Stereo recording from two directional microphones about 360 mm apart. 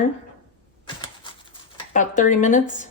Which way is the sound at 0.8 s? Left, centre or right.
Centre.